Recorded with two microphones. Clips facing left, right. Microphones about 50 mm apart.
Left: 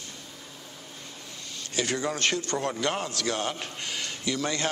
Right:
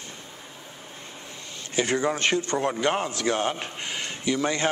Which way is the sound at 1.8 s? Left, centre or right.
Right.